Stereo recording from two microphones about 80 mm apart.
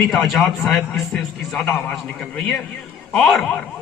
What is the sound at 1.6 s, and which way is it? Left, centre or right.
A man's voice, centre.